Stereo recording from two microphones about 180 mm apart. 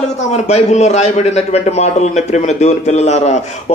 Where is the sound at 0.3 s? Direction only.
40° left (ahead or behind).